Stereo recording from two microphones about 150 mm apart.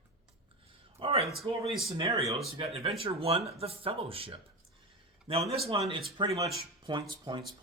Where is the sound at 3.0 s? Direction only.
40° right (ahead or behind).